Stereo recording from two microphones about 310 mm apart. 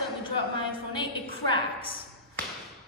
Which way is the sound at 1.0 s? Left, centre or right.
Centre.